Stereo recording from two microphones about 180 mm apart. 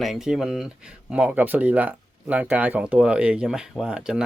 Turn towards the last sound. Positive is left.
turn(degrees=-5)  # may be behind; listen again after turning